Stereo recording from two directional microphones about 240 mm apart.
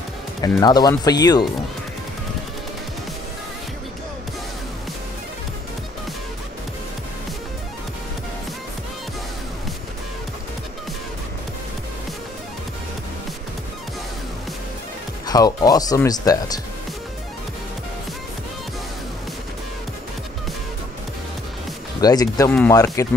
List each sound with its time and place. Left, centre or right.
0.4 s speech: centre
15.2 s speech: centre
22.0 s speech: centre